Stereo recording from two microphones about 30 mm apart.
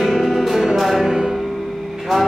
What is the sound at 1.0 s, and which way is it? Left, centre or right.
Music, centre.